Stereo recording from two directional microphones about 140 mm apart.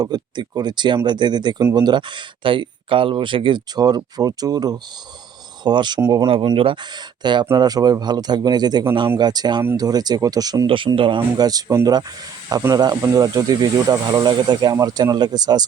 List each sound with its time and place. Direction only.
0.0 s speech: 30° right (ahead or behind)
6.2 s speech: 40° right (ahead or behind)